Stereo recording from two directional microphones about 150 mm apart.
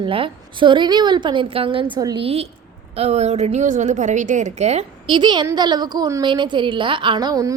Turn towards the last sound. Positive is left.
turn(degrees=-25)  # may be behind; listen again after turning